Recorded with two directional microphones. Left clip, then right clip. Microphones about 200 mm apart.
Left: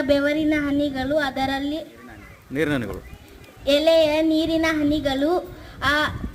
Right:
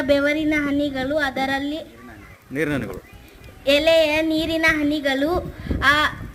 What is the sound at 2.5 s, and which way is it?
Speech, 10° left (ahead or behind).